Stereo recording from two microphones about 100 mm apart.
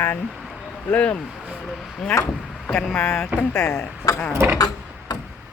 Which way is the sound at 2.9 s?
10° left (ahead or behind).